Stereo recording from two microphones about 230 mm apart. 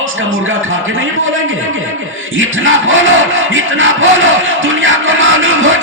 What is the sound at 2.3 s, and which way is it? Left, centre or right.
Crowd, right.